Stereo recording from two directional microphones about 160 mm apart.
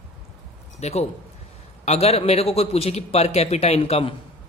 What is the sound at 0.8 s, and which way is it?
Speech, 45° left (ahead or behind).